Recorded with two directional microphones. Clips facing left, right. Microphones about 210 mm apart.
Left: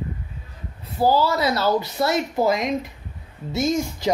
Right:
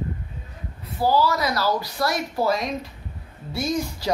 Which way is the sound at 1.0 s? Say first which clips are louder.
Left 2 dB; 25° left (ahead or behind).